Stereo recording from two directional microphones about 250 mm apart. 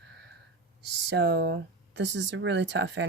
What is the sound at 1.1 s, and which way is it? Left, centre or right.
Speech, right.